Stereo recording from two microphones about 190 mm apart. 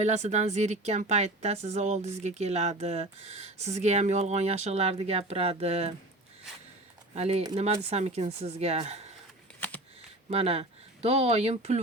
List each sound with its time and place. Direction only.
0.0 s speech: 35° right (ahead or behind)
7.2 s speech: 35° right (ahead or behind)
10.2 s speech: 35° right (ahead or behind)